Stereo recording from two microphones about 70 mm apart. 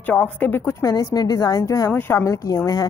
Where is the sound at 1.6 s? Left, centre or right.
Left.